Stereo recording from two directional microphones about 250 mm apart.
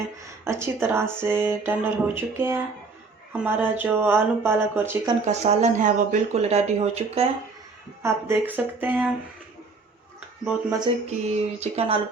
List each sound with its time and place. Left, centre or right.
0.4 s speech: centre
5.2 s speech: right
8.0 s speech: centre
10.4 s speech: centre
10.8 s speech: right